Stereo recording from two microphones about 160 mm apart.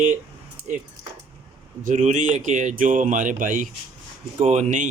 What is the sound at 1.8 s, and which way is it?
Speech, 55° right (ahead or behind).